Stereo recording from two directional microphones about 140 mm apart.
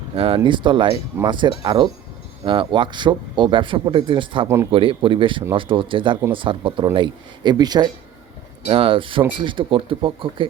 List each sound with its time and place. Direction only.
0.2 s speech: 40° right (ahead or behind)
4.4 s speech: 20° right (ahead or behind)
4.7 s speech: 40° right (ahead or behind)
8.6 s speech: 40° right (ahead or behind)